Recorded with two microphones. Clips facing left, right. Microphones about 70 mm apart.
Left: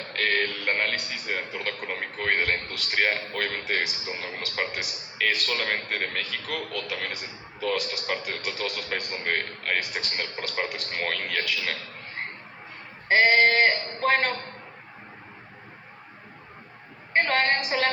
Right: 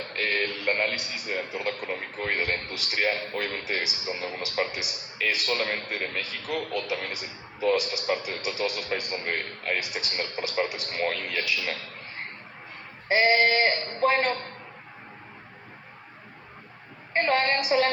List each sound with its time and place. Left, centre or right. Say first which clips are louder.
0.1 s a sound: left 3 dB; left
0.9 s a man's voice: left 1 dB; left
7.6 s a man's voice: right 4 dB; left
17.1 s a woman's voice: left 1 dB; left